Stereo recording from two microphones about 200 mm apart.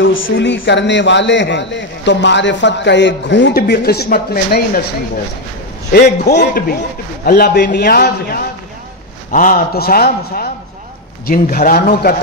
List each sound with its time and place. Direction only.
0.0 s a man's voice: 70° left (ahead or behind); by 4.8 s 50° left (ahead or behind)
6.3 s a man's voice: 50° left (ahead or behind)